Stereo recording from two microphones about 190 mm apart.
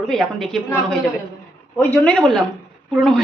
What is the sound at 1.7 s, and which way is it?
Speech, 5° left (ahead or behind).